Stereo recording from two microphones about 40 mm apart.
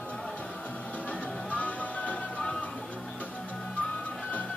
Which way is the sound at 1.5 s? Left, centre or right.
Left.